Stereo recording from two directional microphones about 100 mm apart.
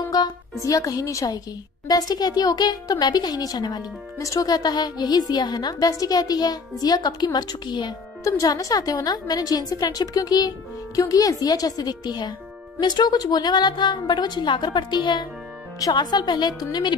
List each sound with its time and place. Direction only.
0.1 s speech: 40° left (ahead or behind)
8.2 s a woman's voice: 35° left (ahead or behind)